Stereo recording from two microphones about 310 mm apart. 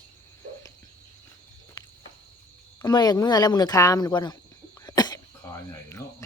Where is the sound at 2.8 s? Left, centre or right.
Centre.